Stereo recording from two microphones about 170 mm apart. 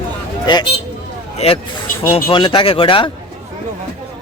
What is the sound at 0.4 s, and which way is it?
Speech, 25° left (ahead or behind).